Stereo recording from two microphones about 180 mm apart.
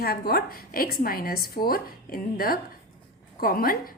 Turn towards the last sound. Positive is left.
turn(degrees=55)  # may be behind; listen again after turning